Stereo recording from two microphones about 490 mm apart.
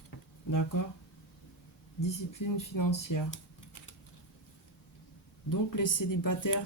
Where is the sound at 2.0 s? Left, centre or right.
Left.